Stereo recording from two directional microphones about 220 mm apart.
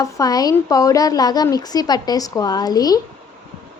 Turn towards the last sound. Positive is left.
turn(degrees=15)  # may be behind; listen again after turning